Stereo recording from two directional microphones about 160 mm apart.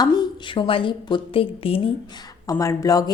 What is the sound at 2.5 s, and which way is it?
Speech, 20° left (ahead or behind).